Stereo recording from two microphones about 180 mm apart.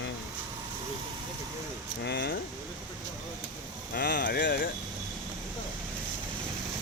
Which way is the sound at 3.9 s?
60° left (ahead or behind).